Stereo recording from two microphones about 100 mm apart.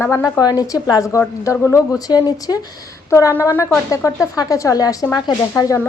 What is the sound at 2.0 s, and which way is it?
Speech, 40° left (ahead or behind).